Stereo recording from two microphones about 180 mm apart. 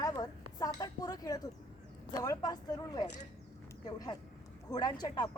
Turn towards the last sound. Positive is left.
turn(degrees=25)  # may be behind; listen again after turning